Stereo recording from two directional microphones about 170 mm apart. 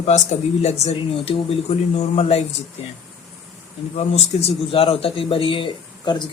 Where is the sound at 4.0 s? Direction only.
40° left (ahead or behind).